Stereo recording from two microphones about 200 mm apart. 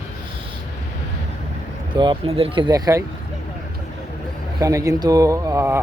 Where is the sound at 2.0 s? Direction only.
25° right (ahead or behind).